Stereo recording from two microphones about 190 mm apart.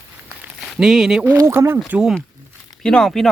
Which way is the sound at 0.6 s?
Centre (ahead or behind).